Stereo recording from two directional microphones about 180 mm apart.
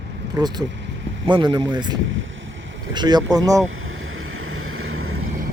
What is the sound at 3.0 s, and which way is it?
Speech, 25° right (ahead or behind).